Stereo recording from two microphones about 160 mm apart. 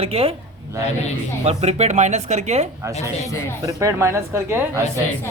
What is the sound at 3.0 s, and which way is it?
Speech, 20° left (ahead or behind).